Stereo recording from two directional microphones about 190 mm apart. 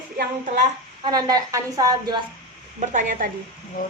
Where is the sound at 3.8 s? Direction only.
45° left (ahead or behind).